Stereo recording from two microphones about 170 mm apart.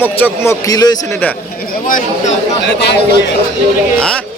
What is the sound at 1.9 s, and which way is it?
Speech, 50° left (ahead or behind).